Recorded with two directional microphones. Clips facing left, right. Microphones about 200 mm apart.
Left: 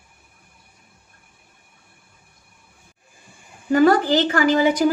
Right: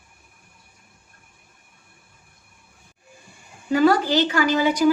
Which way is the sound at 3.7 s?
50° left (ahead or behind).